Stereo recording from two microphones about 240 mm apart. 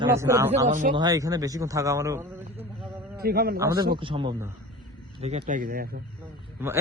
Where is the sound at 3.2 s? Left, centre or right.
Right.